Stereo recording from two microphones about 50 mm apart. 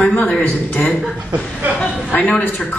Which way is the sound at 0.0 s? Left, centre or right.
Left.